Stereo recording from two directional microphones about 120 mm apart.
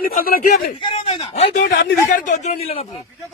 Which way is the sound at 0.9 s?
60° left (ahead or behind).